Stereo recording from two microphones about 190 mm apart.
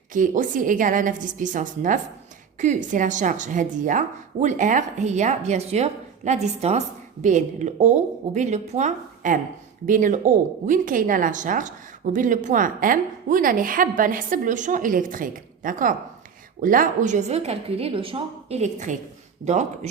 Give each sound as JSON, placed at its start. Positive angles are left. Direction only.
{"t": 0.1, "sound": "speech", "side_deg": -45}